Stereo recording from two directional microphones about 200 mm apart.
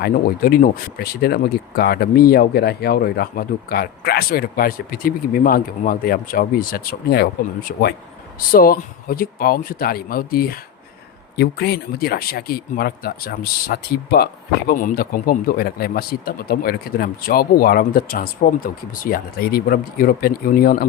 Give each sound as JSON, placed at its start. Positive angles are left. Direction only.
{"t": 0.0, "sound": "speech", "side_deg": 45}